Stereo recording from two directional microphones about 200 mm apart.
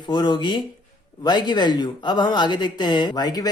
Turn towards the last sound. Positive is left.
turn(degrees=20)  # may be behind; listen again after turning